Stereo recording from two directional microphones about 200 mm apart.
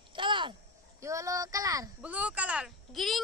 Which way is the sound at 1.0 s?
15° right (ahead or behind).